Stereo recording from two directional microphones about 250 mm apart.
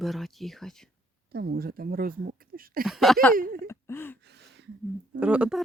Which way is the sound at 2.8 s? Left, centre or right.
Centre.